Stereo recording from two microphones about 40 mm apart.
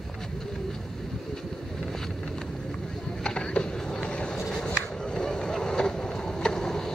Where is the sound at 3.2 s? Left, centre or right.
Left.